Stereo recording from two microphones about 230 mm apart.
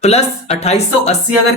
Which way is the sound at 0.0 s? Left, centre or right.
Left.